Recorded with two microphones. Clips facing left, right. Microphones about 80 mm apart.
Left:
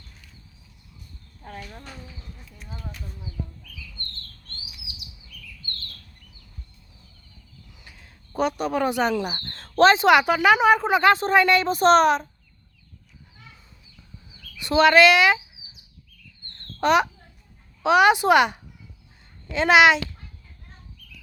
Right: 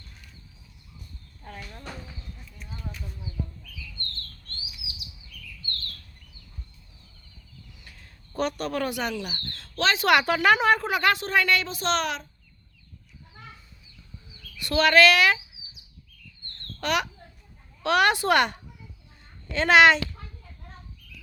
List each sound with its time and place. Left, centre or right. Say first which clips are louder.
1.4 s speech: left 3 dB; centre
7.9 s a sound: left 1 dB; centre
8.9 s speech: left 7 dB; left
10.0 s a woman's voice: left 4 dB; centre; by 12.3 s left
14.6 s a woman's voice: left 3 dB; left
16.8 s a woman's voice: left 8 dB; left
17.8 s speech: left 5 dB; centre